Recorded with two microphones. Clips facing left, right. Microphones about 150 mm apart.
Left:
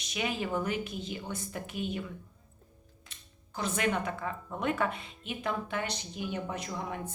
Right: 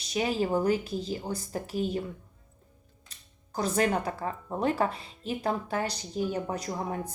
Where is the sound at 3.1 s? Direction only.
35° right (ahead or behind).